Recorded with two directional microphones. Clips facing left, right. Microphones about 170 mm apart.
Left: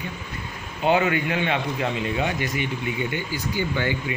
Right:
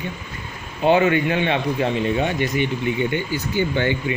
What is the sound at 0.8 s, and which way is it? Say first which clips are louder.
Speech: right 4 dB; 30° right (ahead or behind).